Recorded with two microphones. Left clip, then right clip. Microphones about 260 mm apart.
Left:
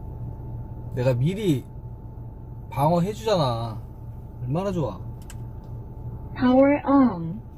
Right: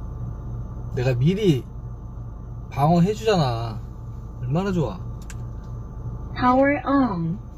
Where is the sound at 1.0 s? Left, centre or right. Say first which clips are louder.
Right 2 dB; left.